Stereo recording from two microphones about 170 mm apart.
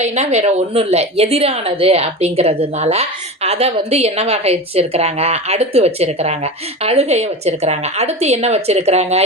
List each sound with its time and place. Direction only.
0.0 s a woman's voice: 40° right (ahead or behind)